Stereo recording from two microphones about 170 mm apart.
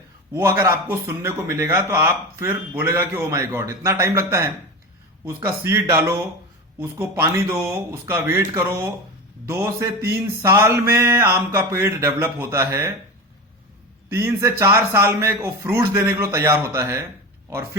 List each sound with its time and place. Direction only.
0.3 s speech: 15° right (ahead or behind)
14.1 s speech: 15° right (ahead or behind)